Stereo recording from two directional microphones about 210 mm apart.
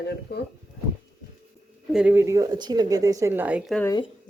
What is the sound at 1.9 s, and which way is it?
Speech, 5° right (ahead or behind).